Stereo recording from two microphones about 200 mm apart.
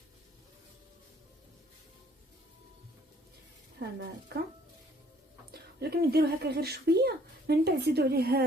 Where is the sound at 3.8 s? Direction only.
55° right (ahead or behind).